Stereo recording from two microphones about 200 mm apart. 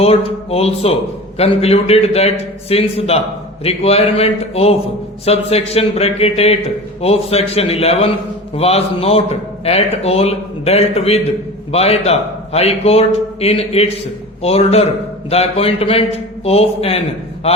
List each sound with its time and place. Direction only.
0.0 s a man's voice: 30° left (ahead or behind)